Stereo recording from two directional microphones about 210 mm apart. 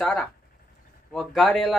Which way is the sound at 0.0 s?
5° left (ahead or behind).